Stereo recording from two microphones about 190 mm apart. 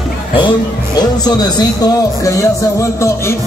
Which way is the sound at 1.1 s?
20° left (ahead or behind).